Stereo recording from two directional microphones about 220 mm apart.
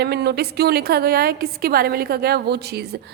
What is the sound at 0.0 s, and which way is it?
A woman's voice, 45° right (ahead or behind).